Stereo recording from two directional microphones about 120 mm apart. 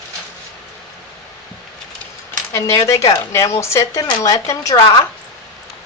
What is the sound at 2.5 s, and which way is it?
Speech, 25° left (ahead or behind).